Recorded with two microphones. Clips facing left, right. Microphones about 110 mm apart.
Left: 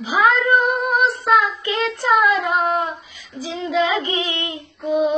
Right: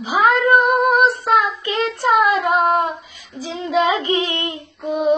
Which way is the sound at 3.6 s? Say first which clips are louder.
Right 2 dB; 35° right (ahead or behind).